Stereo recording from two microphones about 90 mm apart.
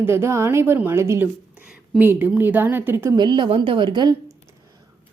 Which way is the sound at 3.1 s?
55° right (ahead or behind).